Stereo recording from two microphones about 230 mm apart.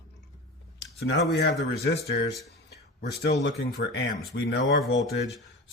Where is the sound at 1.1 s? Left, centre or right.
Left.